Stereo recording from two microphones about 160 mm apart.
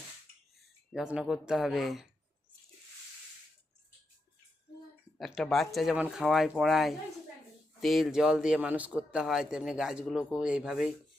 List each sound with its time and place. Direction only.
0.9 s a man's voice: 5° right (ahead or behind)
5.1 s a man's voice: centre (ahead or behind)